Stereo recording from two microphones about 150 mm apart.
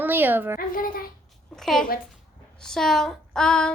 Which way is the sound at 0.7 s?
70° left (ahead or behind).